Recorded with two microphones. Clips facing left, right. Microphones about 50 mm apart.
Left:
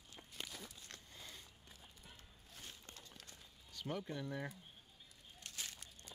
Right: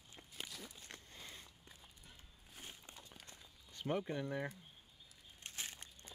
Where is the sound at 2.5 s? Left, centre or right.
Centre.